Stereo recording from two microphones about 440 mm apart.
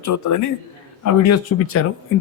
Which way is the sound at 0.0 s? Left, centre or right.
Left.